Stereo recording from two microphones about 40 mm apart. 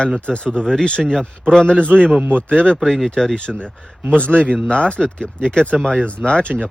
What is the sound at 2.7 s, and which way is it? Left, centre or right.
Speech, centre.